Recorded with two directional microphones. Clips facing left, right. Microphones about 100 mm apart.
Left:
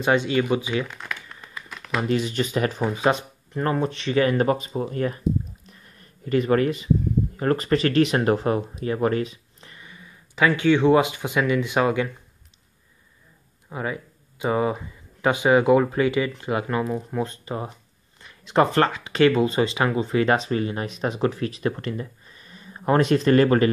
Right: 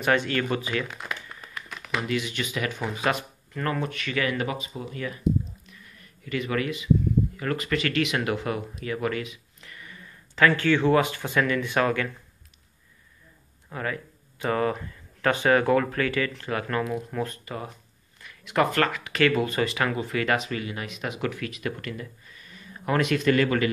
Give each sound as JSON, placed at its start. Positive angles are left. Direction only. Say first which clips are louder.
{"t": 0.0, "sound": "speech", "louder": "left 3 dB", "side_deg": 20}
{"t": 1.4, "sound": "crumpling", "louder": "even", "side_deg": 0}
{"t": 2.0, "sound": "speech", "louder": "left 5 dB", "side_deg": 35}
{"t": 5.7, "sound": "a sound", "louder": "left 1 dB", "side_deg": 35}
{"t": 7.3, "sound": "speech", "louder": "left 6 dB", "side_deg": 35}
{"t": 13.7, "sound": "speech", "louder": "left 2 dB", "side_deg": 15}